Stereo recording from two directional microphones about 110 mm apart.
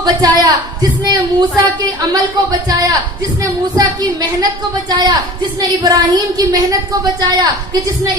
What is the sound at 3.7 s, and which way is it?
Speech, 35° right (ahead or behind).